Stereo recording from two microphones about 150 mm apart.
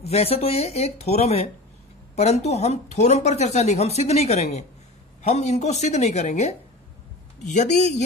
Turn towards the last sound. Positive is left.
turn(degrees=50)  # may be behind; listen again after turning